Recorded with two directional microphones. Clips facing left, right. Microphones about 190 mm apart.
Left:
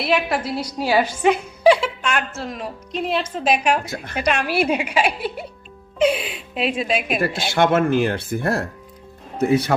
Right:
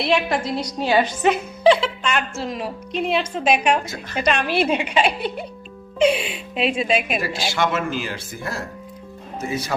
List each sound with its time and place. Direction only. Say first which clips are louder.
0.0 s a woman's voice: even; 5° left (ahead or behind)
3.8 s speech: left 1 dB; 55° left (ahead or behind)
4.2 s a woman's voice: even; 10° left (ahead or behind)
7.2 s speech: left 4 dB; 55° left (ahead or behind)